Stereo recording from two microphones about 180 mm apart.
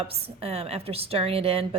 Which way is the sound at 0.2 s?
35° right (ahead or behind).